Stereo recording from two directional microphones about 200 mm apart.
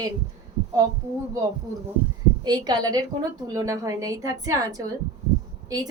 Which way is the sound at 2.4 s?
20° right (ahead or behind).